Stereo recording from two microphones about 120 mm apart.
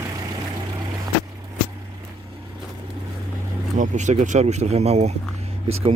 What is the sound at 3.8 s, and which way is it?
Speech, 85° right.